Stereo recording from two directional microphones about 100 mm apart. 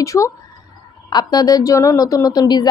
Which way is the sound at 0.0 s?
35° left (ahead or behind).